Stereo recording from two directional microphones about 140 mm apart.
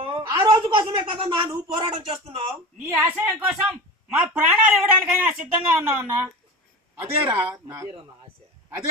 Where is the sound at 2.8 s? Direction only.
20° right (ahead or behind).